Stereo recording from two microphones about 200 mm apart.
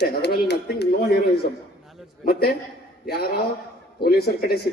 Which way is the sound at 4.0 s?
50° left (ahead or behind).